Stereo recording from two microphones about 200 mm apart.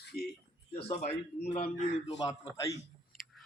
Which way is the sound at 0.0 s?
55° left (ahead or behind).